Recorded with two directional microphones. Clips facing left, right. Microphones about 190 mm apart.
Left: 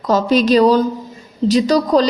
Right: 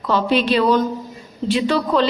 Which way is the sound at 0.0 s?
40° left (ahead or behind).